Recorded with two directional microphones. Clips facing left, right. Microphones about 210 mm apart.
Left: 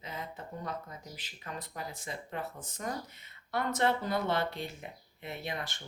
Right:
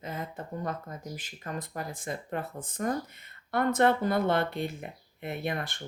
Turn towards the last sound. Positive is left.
turn(degrees=-55)  # may be behind; listen again after turning